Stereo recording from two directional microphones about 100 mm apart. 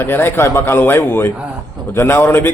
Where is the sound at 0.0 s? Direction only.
20° left (ahead or behind).